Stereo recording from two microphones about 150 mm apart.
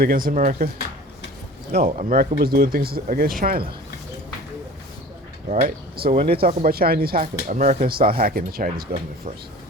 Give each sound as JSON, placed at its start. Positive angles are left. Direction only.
{"t": 0.0, "sound": "speech", "side_deg": -75}
{"t": 1.9, "sound": "speech", "side_deg": -55}
{"t": 5.5, "sound": "speech", "side_deg": -65}
{"t": 6.1, "sound": "speech", "side_deg": -40}
{"t": 6.7, "sound": "speech", "side_deg": -90}
{"t": 7.9, "sound": "speech", "side_deg": -80}